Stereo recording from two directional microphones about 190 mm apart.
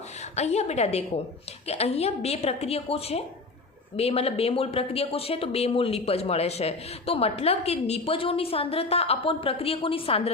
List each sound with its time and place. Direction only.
0.3 s speech: 35° left (ahead or behind)